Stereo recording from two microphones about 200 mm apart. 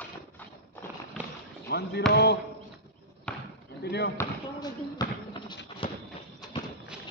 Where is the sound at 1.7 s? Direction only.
55° left (ahead or behind).